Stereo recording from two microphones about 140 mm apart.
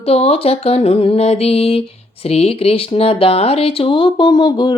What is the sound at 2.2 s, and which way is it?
Music, 45° left (ahead or behind).